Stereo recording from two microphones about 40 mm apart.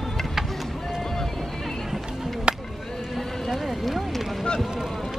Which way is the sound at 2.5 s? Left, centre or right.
Right.